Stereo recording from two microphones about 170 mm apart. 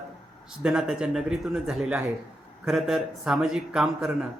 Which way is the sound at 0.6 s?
5° right (ahead or behind).